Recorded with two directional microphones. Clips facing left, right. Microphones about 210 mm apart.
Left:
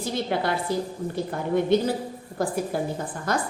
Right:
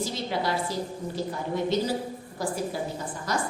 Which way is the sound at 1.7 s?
55° left (ahead or behind).